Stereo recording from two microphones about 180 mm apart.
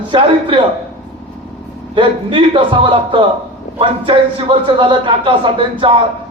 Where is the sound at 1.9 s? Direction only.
30° right (ahead or behind).